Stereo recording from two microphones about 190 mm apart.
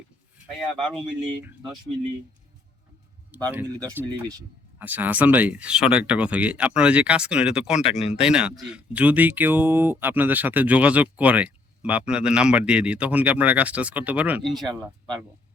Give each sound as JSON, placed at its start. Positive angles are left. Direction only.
{"t": 0.7, "sound": "speech", "side_deg": 0}
{"t": 1.2, "sound": "speech", "side_deg": -25}
{"t": 3.4, "sound": "speech", "side_deg": -10}
{"t": 7.9, "sound": "speech", "side_deg": 35}
{"t": 8.2, "sound": "speech", "side_deg": -5}